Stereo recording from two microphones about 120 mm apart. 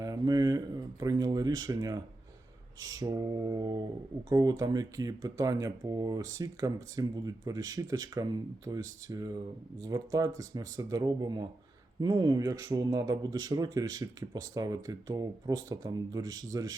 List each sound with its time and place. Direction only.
0.0 s speech: 30° right (ahead or behind)